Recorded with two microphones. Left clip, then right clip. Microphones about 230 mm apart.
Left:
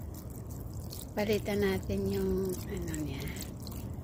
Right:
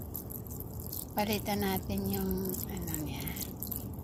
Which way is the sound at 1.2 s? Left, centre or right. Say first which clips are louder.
Left 2 dB; centre.